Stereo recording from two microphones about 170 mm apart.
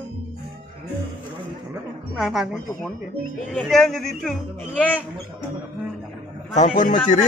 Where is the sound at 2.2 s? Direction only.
Centre (ahead or behind).